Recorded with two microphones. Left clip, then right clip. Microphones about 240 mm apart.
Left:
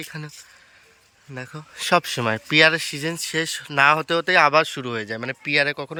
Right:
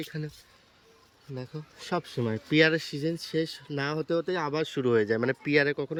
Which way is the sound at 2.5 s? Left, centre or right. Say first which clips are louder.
Left 7 dB; centre.